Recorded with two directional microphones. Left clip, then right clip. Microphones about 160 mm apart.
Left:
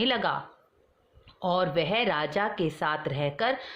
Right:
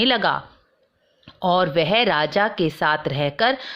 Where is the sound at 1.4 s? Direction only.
35° right (ahead or behind).